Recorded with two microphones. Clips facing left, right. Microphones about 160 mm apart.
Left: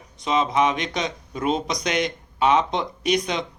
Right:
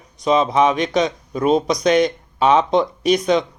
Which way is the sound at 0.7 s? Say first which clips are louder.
Right 9 dB; 20° left (ahead or behind).